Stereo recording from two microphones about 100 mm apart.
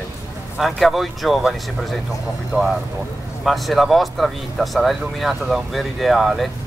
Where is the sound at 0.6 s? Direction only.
Centre (ahead or behind).